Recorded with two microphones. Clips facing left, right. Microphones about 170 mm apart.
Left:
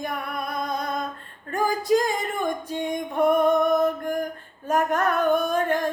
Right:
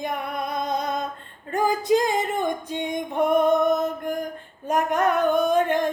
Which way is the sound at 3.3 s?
20° right (ahead or behind).